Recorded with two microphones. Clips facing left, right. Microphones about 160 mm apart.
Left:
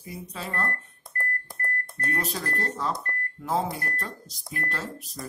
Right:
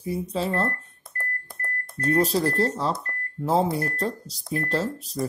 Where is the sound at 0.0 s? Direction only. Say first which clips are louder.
Right 10 dB; 30° right (ahead or behind).